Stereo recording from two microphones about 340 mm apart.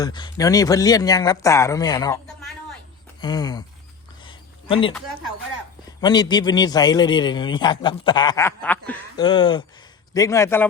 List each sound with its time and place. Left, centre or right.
0.0 s a man's voice: centre
3.2 s a sound: centre
6.0 s a man's voice: centre